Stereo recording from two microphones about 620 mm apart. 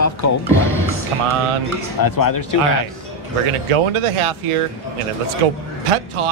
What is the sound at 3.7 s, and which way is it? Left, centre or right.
Speech, right.